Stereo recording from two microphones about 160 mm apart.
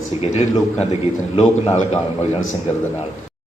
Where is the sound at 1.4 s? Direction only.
40° left (ahead or behind).